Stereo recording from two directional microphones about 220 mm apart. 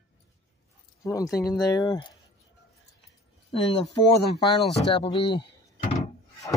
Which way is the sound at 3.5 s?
25° left (ahead or behind).